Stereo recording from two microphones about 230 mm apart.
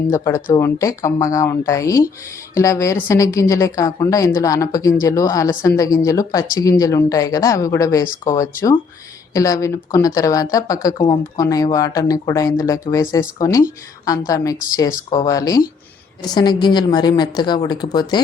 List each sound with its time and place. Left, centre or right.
0.1 s a woman's voice: centre
8.0 s speech: left
9.3 s a woman's voice: centre